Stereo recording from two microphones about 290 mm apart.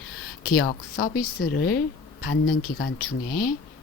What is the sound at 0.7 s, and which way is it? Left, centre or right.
Speech, left.